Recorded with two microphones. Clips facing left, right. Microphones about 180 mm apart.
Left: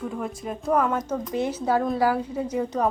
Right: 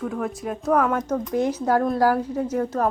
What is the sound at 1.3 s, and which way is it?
Speech, 10° right (ahead or behind).